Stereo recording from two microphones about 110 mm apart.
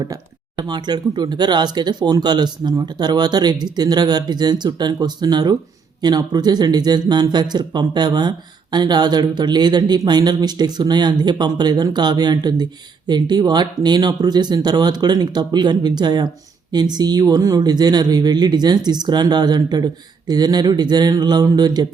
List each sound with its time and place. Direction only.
0.0 s speech: 40° right (ahead or behind)